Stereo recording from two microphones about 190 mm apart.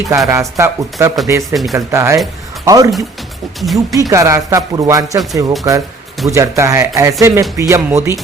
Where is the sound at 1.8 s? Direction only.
15° right (ahead or behind).